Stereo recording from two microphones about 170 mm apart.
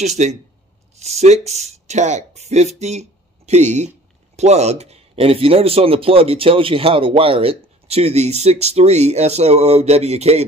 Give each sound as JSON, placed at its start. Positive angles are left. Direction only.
{"t": 0.0, "sound": "speech", "side_deg": -40}